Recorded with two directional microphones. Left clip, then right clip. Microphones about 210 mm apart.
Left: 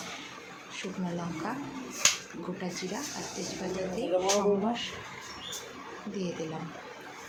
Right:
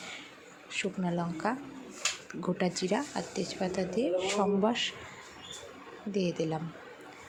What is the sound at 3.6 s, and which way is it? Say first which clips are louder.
Speech: right 2 dB; 35° right (ahead or behind).